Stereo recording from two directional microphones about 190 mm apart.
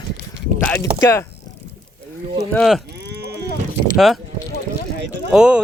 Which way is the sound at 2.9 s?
60° right (ahead or behind).